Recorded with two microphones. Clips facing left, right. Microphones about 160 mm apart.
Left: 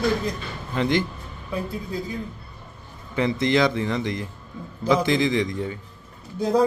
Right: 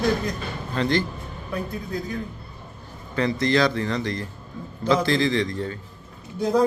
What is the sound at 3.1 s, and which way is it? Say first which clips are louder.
Speech: even; 20° left (ahead or behind).